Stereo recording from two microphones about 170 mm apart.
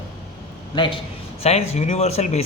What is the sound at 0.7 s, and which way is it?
Speech, 30° left (ahead or behind).